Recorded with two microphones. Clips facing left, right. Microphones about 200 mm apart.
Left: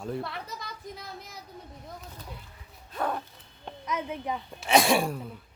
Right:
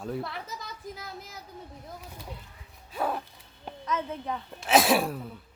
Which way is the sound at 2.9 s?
5° right (ahead or behind).